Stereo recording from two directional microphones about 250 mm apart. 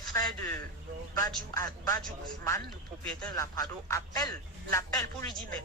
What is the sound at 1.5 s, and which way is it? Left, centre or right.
Speech, centre.